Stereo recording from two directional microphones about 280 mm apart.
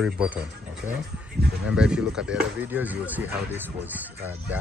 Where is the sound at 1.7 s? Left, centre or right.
Centre.